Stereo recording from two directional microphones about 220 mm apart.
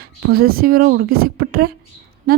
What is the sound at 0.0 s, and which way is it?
Speech, 45° right (ahead or behind).